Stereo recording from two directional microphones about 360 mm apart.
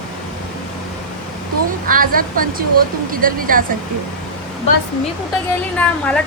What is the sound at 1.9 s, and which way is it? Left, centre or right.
Speech, right.